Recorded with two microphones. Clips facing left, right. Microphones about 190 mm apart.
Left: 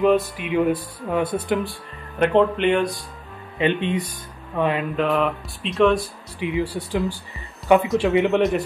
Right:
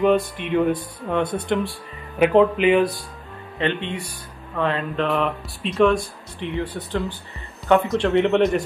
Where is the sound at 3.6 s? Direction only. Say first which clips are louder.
Left 4 dB; 15° left (ahead or behind).